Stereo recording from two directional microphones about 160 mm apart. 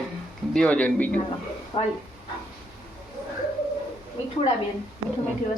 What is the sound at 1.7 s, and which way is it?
Speech, 35° left (ahead or behind).